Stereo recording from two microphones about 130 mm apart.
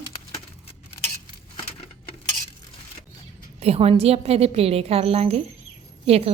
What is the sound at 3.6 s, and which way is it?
Speech, 50° right (ahead or behind).